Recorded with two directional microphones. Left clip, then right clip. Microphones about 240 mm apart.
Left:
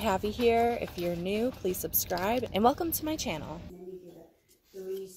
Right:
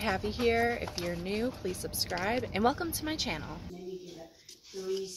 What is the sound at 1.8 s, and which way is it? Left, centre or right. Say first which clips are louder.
Speech: right 1 dB; centre.